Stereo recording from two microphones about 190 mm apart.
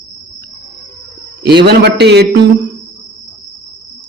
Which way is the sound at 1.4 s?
60° right (ahead or behind).